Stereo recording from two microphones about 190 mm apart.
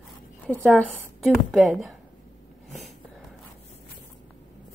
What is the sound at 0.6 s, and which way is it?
Speech, centre (ahead or behind).